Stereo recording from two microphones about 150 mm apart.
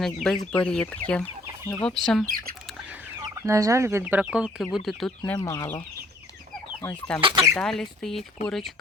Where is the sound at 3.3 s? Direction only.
20° right (ahead or behind); by 5.1 s centre (ahead or behind).